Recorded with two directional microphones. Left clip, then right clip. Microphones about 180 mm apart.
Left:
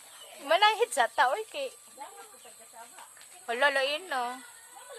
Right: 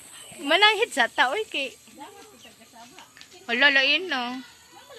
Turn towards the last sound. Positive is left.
turn(degrees=0)  # may be behind; listen again after turning